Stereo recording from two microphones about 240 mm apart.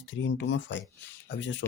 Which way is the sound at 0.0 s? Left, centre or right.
Left.